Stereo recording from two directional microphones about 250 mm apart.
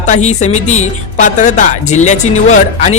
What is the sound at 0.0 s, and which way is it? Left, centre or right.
Speech, left.